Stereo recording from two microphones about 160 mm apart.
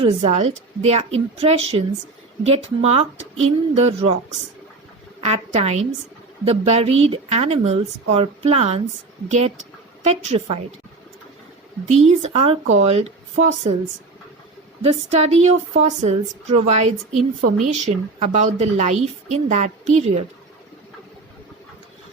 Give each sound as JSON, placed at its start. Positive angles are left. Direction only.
{"t": 0.0, "sound": "speech", "side_deg": -40}
{"t": 5.2, "sound": "speech", "side_deg": -45}
{"t": 10.0, "sound": "speech", "side_deg": -40}
{"t": 11.9, "sound": "speech", "side_deg": -40}
{"t": 14.8, "sound": "speech", "side_deg": -40}